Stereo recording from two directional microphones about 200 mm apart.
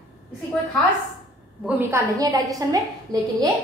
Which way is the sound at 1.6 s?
10° right (ahead or behind).